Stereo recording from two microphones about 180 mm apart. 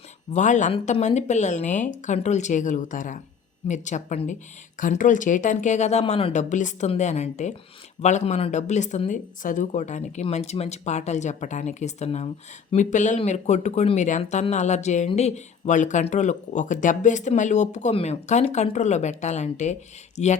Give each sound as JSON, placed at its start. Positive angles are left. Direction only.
{"t": 0.3, "sound": "speech", "side_deg": 40}